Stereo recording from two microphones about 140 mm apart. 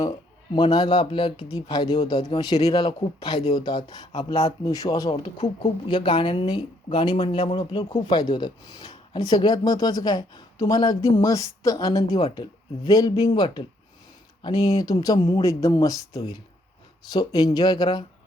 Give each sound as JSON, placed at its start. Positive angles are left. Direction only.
{"t": 0.0, "sound": "speech", "side_deg": 30}
{"t": 5.1, "sound": "speech", "side_deg": 40}